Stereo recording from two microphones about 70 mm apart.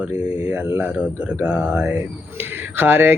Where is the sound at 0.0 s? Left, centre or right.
Centre.